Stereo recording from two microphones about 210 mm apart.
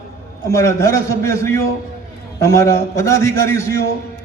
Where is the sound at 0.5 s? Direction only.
15° left (ahead or behind).